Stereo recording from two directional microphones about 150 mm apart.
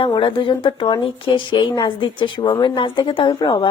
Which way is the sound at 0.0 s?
35° left (ahead or behind).